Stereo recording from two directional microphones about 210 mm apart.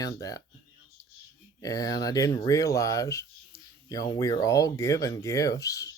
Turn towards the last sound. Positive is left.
turn(degrees=15)  # may be behind; listen again after turning